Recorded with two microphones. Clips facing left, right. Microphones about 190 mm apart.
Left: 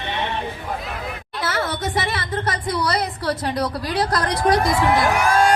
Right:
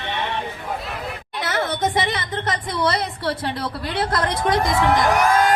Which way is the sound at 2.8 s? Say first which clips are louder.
Right 3 dB; 25° right (ahead or behind).